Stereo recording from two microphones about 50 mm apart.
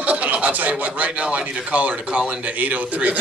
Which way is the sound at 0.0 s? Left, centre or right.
Right.